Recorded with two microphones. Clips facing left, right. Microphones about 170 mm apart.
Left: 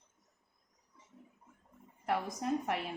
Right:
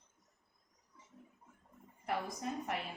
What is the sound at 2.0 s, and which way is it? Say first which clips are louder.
Speech: left 5 dB; 60° left (ahead or behind).